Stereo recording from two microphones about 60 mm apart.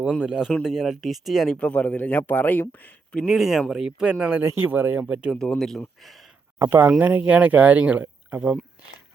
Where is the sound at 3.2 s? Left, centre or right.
Centre.